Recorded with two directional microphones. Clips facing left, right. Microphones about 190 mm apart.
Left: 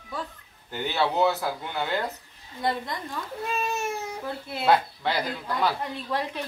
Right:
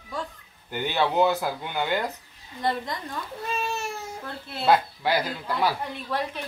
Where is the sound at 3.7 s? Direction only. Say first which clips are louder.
Left 3 dB; 20° left (ahead or behind).